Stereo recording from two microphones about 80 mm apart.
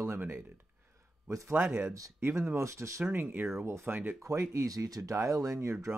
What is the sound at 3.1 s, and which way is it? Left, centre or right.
Speech, right.